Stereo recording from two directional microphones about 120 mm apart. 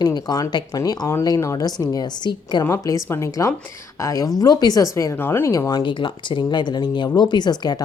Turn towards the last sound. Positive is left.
turn(degrees=35)  # may be behind; listen again after turning